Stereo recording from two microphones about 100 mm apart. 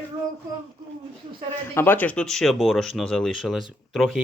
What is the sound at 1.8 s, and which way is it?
Speech, 20° left (ahead or behind).